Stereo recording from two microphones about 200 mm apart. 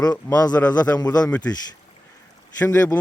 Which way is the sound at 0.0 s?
20° left (ahead or behind).